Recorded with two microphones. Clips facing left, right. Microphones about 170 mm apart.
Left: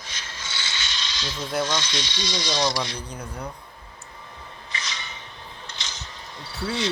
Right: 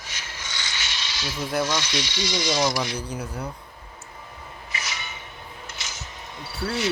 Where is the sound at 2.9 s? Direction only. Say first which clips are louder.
Right 4 dB; 10° right (ahead or behind).